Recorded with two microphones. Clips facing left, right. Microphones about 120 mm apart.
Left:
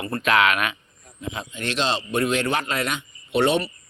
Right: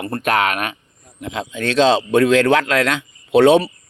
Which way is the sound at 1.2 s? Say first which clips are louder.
Right 6 dB; 90° right.